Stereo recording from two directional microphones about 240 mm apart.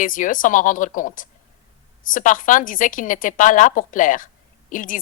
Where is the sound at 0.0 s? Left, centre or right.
Left.